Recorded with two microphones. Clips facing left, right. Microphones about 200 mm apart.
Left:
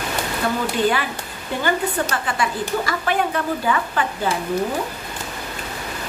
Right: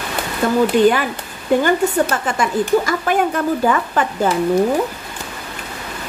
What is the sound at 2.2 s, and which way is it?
Speech, 45° right (ahead or behind).